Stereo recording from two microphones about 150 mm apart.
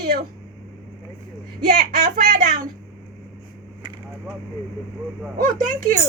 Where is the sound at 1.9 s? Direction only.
65° right (ahead or behind).